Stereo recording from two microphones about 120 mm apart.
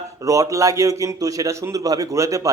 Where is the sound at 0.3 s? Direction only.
25° right (ahead or behind).